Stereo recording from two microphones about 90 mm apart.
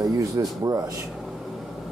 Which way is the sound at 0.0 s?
40° right (ahead or behind).